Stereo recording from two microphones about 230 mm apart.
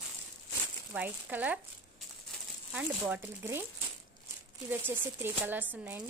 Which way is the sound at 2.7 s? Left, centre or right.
Centre.